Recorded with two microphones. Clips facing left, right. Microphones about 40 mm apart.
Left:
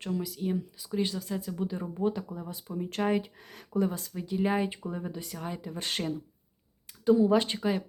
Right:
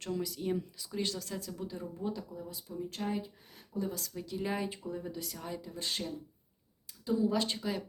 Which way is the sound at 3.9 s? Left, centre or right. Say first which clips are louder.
Left 5 dB; left.